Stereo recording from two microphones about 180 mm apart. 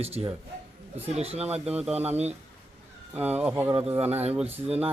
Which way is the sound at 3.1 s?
10° right (ahead or behind).